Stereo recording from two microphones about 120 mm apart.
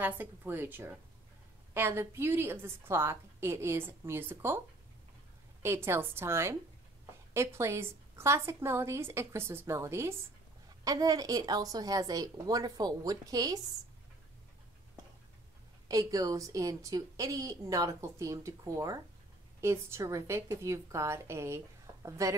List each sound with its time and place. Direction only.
0.0 s a woman's voice: 15° right (ahead or behind)
5.6 s a woman's voice: 20° right (ahead or behind)
15.9 s a woman's voice: 30° right (ahead or behind)